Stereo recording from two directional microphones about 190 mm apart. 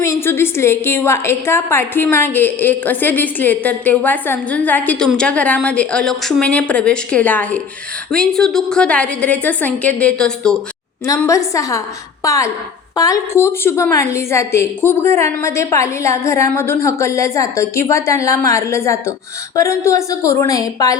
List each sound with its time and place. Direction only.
0.0 s a woman's voice: 15° left (ahead or behind)
11.0 s a woman's voice: 15° left (ahead or behind)